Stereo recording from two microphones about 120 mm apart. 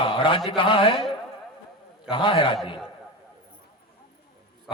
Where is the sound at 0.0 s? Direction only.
45° left (ahead or behind).